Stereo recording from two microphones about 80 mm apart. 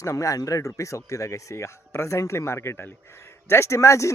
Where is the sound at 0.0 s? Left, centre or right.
Left.